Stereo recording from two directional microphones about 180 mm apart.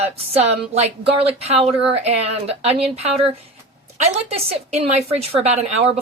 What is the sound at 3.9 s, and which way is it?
Speech, 35° right (ahead or behind).